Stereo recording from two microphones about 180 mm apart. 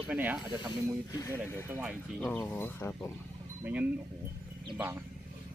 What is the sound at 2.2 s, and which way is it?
Speech, 10° left (ahead or behind).